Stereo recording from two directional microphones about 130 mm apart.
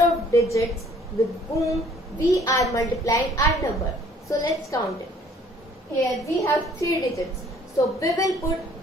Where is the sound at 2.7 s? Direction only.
25° left (ahead or behind).